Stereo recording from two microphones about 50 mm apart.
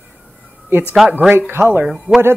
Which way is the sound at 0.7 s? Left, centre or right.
Right.